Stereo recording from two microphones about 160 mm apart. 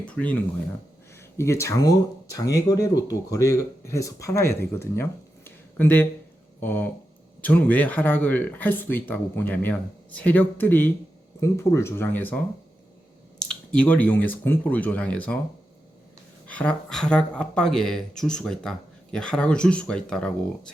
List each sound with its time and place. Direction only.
0.0 s speech: 10° left (ahead or behind)
5.5 s a sound: 10° left (ahead or behind)
6.6 s speech: 10° left (ahead or behind)
13.7 s speech: 10° left (ahead or behind)
16.5 s speech: 5° left (ahead or behind)